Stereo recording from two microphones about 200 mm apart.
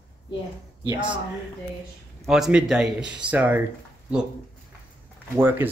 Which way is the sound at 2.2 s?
Centre (ahead or behind).